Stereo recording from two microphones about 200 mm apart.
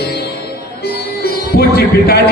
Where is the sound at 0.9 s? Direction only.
50° left (ahead or behind).